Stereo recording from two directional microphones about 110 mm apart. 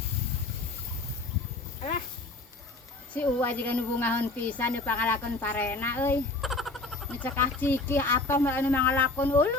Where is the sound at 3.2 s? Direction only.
15° left (ahead or behind).